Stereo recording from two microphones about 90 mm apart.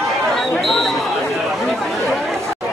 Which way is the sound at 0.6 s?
5° left (ahead or behind).